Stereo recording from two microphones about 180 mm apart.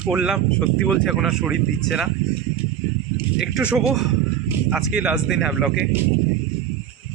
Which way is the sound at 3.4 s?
5° right (ahead or behind).